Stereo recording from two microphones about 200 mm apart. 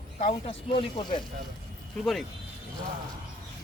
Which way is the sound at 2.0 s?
Centre (ahead or behind).